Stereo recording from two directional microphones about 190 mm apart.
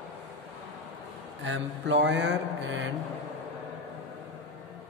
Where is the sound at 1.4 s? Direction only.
75° right (ahead or behind).